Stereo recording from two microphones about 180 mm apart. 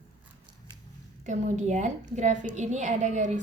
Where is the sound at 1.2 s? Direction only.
40° right (ahead or behind).